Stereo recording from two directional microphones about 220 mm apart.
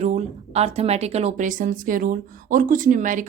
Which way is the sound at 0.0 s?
30° right (ahead or behind).